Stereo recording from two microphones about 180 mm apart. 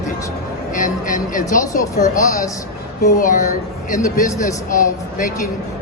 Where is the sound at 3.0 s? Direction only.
50° left (ahead or behind).